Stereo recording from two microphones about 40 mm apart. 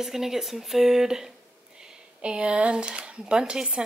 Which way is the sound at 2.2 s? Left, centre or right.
Right.